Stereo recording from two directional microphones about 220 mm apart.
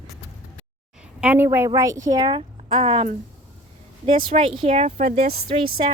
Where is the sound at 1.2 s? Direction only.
10° right (ahead or behind); by 5.4 s 35° right (ahead or behind).